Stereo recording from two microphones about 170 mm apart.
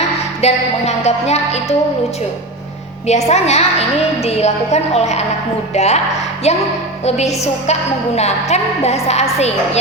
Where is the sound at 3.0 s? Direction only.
40° left (ahead or behind).